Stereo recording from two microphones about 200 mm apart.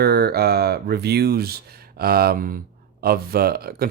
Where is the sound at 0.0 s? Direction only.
50° right (ahead or behind).